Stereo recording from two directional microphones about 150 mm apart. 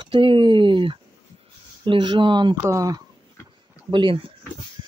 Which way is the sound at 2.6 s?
20° right (ahead or behind).